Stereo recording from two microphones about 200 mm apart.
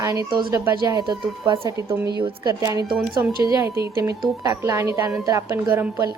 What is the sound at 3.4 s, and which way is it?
A woman's voice, 15° right (ahead or behind).